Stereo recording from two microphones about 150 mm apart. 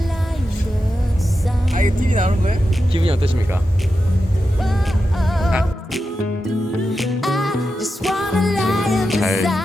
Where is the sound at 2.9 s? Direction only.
40° right (ahead or behind).